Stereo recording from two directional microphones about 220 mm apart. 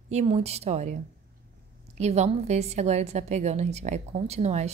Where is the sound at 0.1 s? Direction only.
30° right (ahead or behind).